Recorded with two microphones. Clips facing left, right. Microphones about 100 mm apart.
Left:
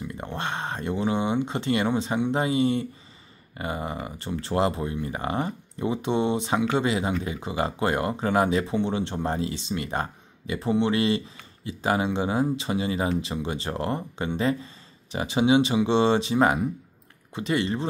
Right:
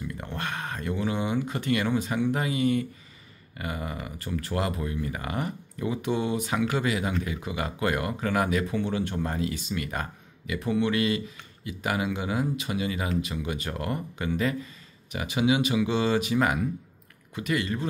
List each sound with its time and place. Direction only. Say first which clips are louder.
0.0 s speech: left 2 dB; 25° left (ahead or behind)